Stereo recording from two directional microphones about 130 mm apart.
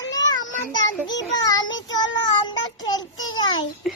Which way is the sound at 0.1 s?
30° left (ahead or behind).